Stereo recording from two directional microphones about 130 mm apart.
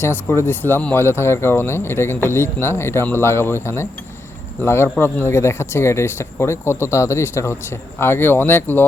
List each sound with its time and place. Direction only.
0.0 s speech: 20° left (ahead or behind)